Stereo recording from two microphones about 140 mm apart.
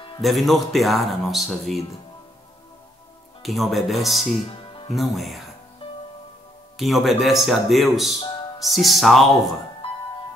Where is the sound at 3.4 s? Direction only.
Centre (ahead or behind).